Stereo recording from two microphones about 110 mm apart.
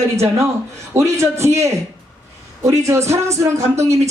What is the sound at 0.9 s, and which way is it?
Speech, 25° right (ahead or behind).